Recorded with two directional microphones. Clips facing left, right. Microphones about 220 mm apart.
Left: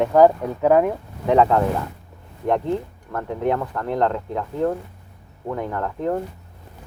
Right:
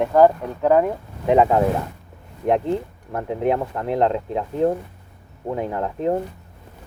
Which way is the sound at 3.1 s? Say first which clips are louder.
Right 1 dB; 20° right (ahead or behind).